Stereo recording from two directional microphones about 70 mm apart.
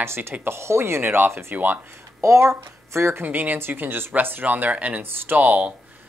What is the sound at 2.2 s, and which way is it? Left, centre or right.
Speech, right.